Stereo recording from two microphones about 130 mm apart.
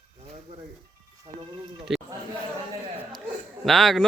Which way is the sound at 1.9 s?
Centre (ahead or behind).